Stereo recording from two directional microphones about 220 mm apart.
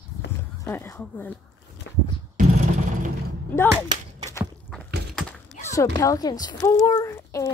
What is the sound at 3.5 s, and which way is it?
Speech, 10° left (ahead or behind).